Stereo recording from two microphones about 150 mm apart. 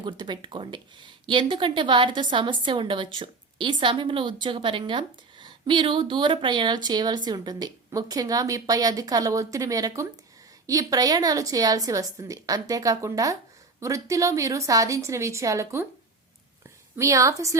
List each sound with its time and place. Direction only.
0.0 s a woman's voice: 30° right (ahead or behind)
17.0 s a woman's voice: 20° right (ahead or behind)